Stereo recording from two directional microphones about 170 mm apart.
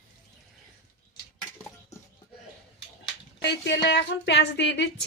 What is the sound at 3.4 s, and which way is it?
A woman's voice, 90° left.